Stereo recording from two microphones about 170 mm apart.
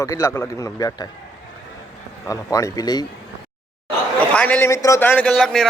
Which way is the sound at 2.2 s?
20° left (ahead or behind).